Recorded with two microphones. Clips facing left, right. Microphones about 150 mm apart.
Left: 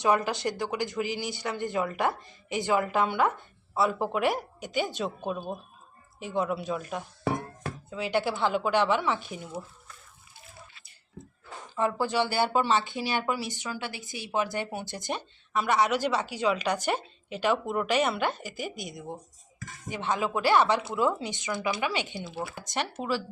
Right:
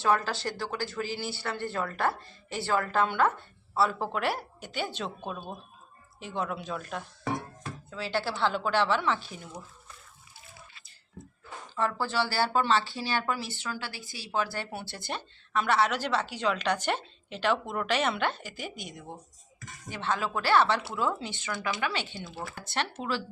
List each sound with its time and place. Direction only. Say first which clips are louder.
0.0 s speech: left 2 dB; 15° left (ahead or behind)
11.8 s speech: left 3 dB; 15° left (ahead or behind)